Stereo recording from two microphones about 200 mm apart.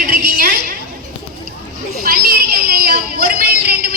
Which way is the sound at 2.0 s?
50° right (ahead or behind).